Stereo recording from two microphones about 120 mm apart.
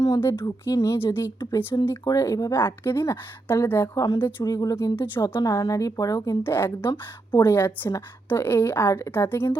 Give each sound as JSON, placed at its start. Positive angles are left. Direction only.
{"t": 0.0, "sound": "a woman's voice", "side_deg": 25}
{"t": 6.4, "sound": "a woman's voice", "side_deg": 20}